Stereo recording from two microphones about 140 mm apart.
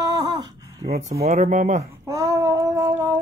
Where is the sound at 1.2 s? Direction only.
55° right (ahead or behind).